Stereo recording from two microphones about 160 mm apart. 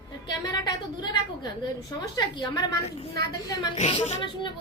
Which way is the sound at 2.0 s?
25° left (ahead or behind).